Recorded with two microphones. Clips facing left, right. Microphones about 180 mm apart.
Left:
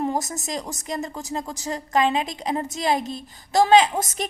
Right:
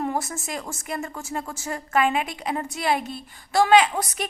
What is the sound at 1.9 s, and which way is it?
Speech, 35° left (ahead or behind).